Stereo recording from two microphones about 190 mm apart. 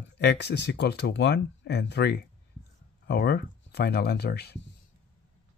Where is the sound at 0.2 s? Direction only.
60° left (ahead or behind).